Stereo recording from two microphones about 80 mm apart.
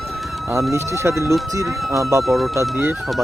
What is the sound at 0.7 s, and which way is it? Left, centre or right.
Speech, right.